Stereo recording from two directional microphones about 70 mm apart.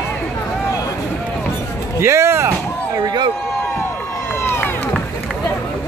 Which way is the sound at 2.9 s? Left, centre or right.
Right.